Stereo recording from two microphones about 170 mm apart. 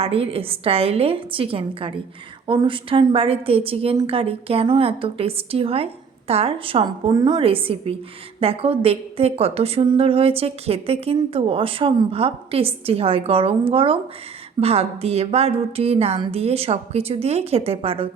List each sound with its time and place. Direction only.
0.0 s a woman's voice: 35° right (ahead or behind)